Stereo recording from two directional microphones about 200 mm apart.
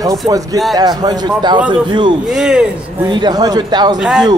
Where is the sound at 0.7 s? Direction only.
20° right (ahead or behind).